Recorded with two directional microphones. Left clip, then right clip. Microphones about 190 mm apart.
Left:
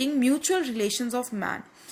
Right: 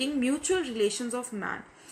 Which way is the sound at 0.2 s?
45° left (ahead or behind).